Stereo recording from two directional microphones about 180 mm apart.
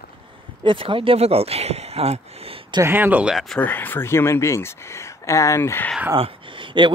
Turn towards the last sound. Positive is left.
turn(degrees=-25)  # may be behind; listen again after turning